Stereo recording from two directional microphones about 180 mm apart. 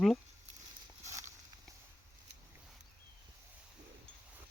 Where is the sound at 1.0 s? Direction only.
15° right (ahead or behind).